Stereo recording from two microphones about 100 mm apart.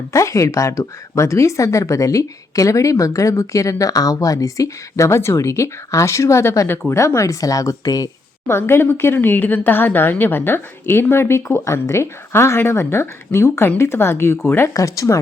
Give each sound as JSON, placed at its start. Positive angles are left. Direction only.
{"t": 0.1, "sound": "speech", "side_deg": 30}
{"t": 8.4, "sound": "speech", "side_deg": 25}